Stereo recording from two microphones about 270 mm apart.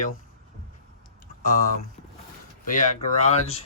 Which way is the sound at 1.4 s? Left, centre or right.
Left.